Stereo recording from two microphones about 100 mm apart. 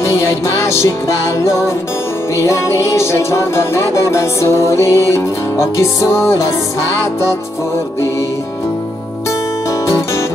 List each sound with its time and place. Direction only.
0.1 s music: 30° left (ahead or behind)